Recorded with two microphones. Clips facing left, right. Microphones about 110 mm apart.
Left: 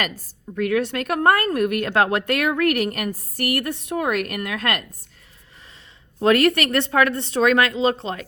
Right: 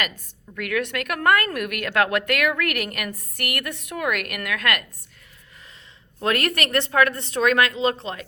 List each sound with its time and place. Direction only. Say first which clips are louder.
0.5 s a woman's voice: left 5 dB; 30° left (ahead or behind)
6.2 s a woman's voice: left 7 dB; 30° left (ahead or behind)